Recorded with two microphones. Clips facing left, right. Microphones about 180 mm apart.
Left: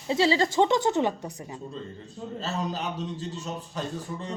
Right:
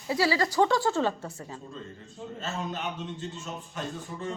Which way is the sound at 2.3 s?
35° left (ahead or behind).